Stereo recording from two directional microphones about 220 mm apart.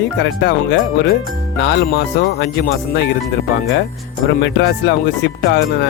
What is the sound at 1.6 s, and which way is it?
Speech, 50° left (ahead or behind).